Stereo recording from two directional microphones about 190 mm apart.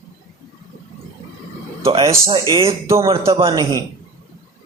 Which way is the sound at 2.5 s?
30° right (ahead or behind).